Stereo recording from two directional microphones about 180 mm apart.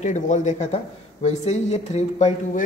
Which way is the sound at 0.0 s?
40° left (ahead or behind).